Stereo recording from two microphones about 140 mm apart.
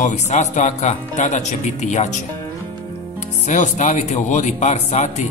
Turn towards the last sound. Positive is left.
turn(degrees=50)  # may be behind; listen again after turning